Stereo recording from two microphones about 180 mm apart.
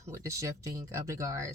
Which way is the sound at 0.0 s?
15° right (ahead or behind).